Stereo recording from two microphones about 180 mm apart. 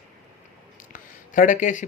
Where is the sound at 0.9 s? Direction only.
45° left (ahead or behind).